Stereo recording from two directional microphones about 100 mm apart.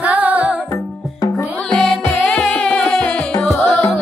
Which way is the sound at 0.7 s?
40° left (ahead or behind).